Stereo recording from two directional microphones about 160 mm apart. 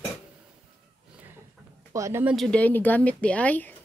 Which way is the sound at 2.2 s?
Centre (ahead or behind).